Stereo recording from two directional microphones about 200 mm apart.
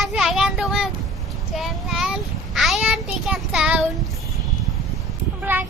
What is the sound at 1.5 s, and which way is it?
Child singing, centre (ahead or behind).